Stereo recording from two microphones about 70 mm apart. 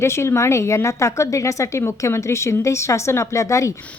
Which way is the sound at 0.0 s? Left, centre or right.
Left.